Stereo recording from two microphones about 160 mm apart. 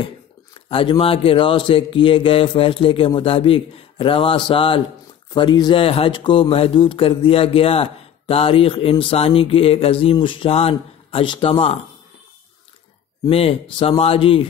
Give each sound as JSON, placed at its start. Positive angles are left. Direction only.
{"t": 0.7, "sound": "speech", "side_deg": 35}
{"t": 13.3, "sound": "speech", "side_deg": 35}